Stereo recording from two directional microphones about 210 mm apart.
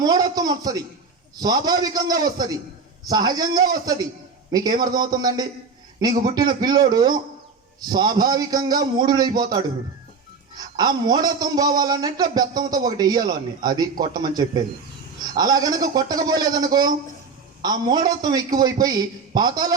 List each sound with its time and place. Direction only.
0.0 s a man's voice: 20° right (ahead or behind)
10.8 s a man's voice: 20° right (ahead or behind)